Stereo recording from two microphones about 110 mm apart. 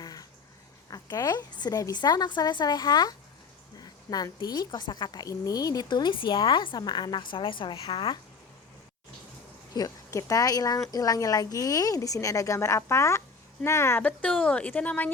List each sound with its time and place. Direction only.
0.0 s a sound: 35° left (ahead or behind)
0.9 s a woman's voice: 35° left (ahead or behind); by 8.2 s 50° left (ahead or behind)
9.7 s speech: 30° left (ahead or behind)
14.0 s speech: 10° left (ahead or behind)